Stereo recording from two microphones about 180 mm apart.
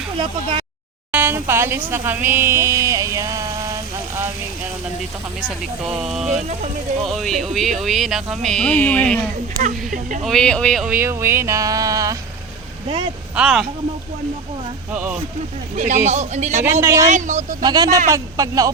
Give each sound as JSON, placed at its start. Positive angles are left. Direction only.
{"t": 1.1, "sound": "speech", "side_deg": -10}
{"t": 5.4, "sound": "speech", "side_deg": 0}
{"t": 9.6, "sound": "speech", "side_deg": -45}
{"t": 10.2, "sound": "speech", "side_deg": 5}
{"t": 10.8, "sound": "speech", "side_deg": -10}
{"t": 13.3, "sound": "speech", "side_deg": -5}
{"t": 14.9, "sound": "speech", "side_deg": -10}
{"t": 15.7, "sound": "speech", "side_deg": -40}
{"t": 16.8, "sound": "speech", "side_deg": -15}
{"t": 17.1, "sound": "speech", "side_deg": -40}
{"t": 17.6, "sound": "speech", "side_deg": -20}